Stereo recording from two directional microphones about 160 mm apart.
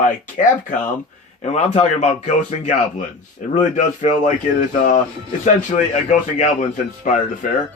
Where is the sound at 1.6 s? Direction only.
45° left (ahead or behind).